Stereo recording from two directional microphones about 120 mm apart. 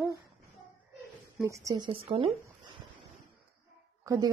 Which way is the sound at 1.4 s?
25° right (ahead or behind).